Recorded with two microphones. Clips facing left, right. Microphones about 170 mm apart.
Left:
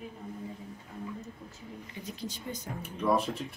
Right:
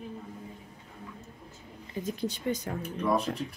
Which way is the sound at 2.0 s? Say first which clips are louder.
Right 9 dB; 50° right (ahead or behind).